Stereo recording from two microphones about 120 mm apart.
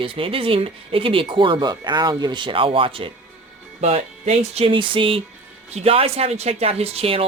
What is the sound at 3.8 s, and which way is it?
Speech, 60° right (ahead or behind).